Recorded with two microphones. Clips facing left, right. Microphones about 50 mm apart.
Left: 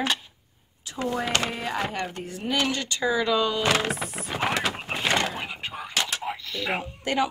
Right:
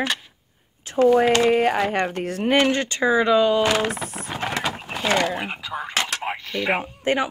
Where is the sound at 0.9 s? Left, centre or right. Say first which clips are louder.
Right 12 dB; right.